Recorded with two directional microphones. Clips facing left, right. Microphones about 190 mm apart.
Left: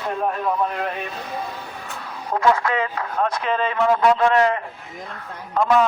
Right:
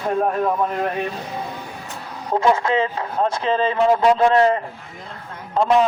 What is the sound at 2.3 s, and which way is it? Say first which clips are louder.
A man's voice: right 2 dB; 20° right (ahead or behind).